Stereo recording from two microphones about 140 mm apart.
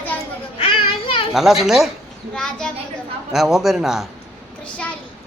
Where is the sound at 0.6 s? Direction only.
40° left (ahead or behind).